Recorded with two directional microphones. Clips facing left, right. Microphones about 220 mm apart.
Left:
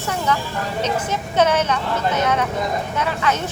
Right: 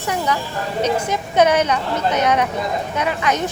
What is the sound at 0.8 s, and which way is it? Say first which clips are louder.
A woman's voice: right 5 dB; 15° right (ahead or behind).